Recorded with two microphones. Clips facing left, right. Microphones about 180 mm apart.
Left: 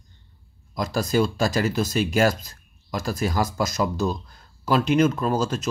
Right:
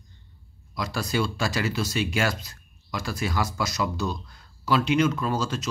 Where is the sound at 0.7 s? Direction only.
45° left (ahead or behind).